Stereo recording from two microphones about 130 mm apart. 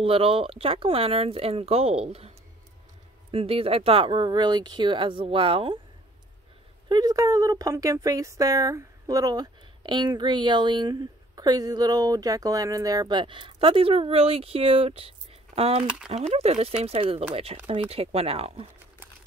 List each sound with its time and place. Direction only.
0.0 s speech: 45° right (ahead or behind)
6.9 s speech: 30° right (ahead or behind); by 15.8 s 50° right (ahead or behind)
15.8 s speech: 10° right (ahead or behind)
16.1 s speech: 55° right (ahead or behind)